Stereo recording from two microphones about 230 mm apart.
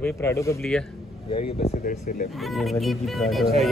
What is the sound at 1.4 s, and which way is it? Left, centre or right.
Speech, left.